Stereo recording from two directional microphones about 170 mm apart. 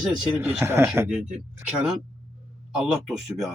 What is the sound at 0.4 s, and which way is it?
Speech, 10° right (ahead or behind).